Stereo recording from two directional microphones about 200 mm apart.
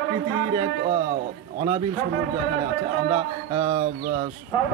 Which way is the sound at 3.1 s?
25° right (ahead or behind).